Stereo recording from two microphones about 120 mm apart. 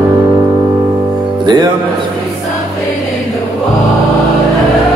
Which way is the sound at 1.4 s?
40° right (ahead or behind).